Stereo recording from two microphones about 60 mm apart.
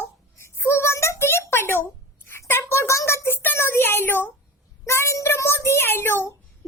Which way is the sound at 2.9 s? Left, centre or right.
Left.